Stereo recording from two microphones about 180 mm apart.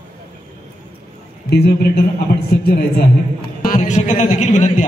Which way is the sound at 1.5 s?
60° left (ahead or behind).